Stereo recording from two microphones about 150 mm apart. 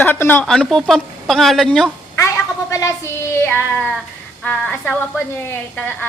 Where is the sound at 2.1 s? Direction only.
20° left (ahead or behind).